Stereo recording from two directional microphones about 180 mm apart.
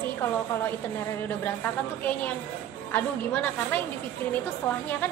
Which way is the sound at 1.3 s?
10° left (ahead or behind).